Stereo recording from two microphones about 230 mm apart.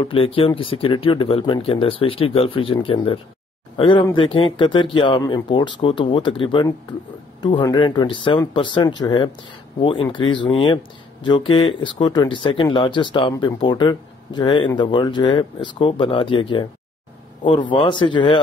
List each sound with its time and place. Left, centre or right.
0.0 s speech: left
17.6 s speech: left